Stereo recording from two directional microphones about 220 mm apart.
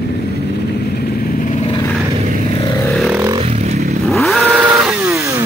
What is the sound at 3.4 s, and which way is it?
Motorcycle, 30° right (ahead or behind).